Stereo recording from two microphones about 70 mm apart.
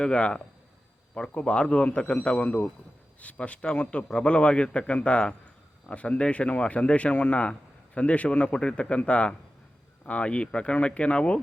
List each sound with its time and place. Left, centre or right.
0.0 s a man's voice: centre